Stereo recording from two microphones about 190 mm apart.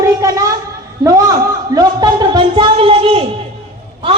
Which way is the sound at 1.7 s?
20° right (ahead or behind).